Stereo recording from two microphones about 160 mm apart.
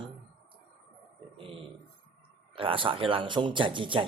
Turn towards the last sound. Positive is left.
turn(degrees=-30)  # may be behind; listen again after turning